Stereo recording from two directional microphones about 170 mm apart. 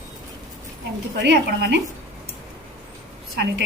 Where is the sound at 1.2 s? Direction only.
85° right.